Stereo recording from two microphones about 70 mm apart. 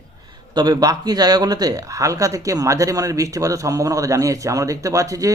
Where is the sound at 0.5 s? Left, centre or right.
Right.